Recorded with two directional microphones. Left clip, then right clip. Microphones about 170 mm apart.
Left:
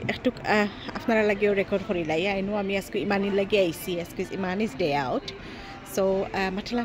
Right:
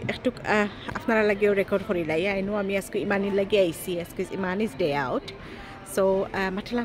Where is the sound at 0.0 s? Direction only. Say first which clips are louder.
Left 1 dB; centre (ahead or behind).